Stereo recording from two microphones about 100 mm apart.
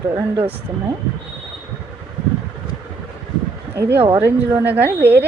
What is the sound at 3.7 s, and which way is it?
Speech, 25° right (ahead or behind).